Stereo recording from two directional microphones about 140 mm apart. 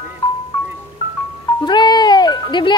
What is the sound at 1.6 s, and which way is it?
Music, 30° left (ahead or behind).